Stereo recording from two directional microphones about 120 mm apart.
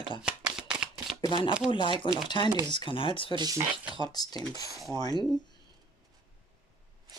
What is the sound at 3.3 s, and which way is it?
Speech, 40° right (ahead or behind).